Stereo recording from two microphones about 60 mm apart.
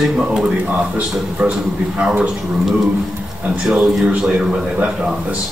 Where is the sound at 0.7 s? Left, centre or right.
Right.